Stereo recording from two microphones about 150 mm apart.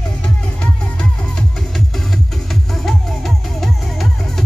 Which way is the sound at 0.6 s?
5° left (ahead or behind).